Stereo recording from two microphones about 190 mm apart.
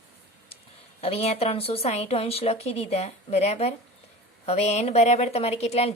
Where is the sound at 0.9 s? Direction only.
35° left (ahead or behind).